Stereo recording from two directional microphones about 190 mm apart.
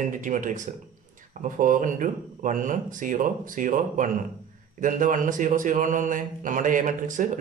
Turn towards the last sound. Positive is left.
turn(degrees=-40)  # may be behind; listen again after turning